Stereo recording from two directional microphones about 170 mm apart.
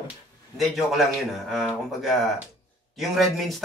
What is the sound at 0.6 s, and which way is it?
A man's voice, centre (ahead or behind).